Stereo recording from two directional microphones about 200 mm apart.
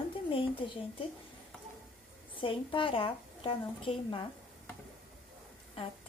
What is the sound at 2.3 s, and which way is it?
Speech, 25° left (ahead or behind).